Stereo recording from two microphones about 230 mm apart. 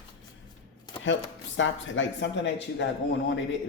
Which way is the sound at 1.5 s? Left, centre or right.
Left.